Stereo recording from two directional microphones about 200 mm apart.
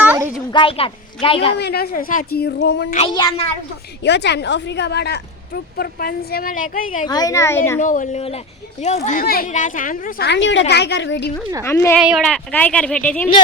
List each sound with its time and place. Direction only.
0.0 s a sound: 5° right (ahead or behind)
0.5 s a woman's voice: 25° left (ahead or behind)
1.5 s a woman's voice: 55° left (ahead or behind)
3.1 s a woman's voice: 20° left (ahead or behind)
4.0 s a woman's voice: 60° left (ahead or behind); by 7.1 s 40° left (ahead or behind)
7.1 s speech: 20° left (ahead or behind)
7.8 s speech: 40° left (ahead or behind)
9.2 s a woman's voice: 45° left (ahead or behind)
11.6 s speech: 10° left (ahead or behind)
11.9 s speech: centre (ahead or behind)